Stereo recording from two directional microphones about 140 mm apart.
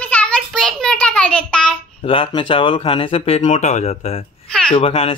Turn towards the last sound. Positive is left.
turn(degrees=40)  # may be behind; listen again after turning